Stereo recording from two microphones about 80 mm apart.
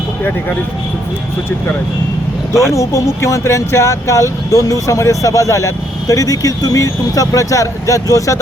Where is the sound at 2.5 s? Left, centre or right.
Left.